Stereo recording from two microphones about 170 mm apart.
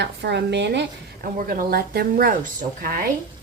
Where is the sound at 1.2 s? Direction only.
55° right (ahead or behind).